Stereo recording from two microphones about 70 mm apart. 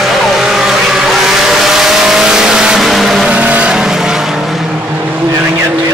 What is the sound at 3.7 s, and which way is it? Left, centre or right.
Vehicle, centre.